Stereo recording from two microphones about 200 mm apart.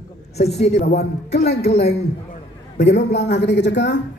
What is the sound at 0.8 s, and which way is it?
Speech, 55° left (ahead or behind).